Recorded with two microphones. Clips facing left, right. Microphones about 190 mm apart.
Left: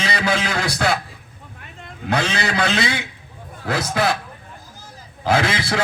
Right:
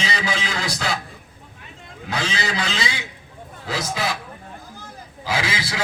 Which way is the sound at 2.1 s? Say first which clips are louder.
Left 4 dB; 55° left (ahead or behind).